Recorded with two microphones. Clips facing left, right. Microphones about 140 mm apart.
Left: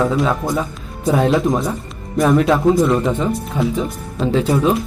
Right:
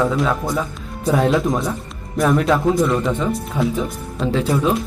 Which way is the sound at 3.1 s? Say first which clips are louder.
Left 2 dB; 25° left (ahead or behind).